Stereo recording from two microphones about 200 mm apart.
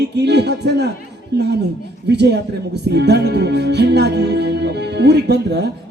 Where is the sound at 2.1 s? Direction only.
55° right (ahead or behind).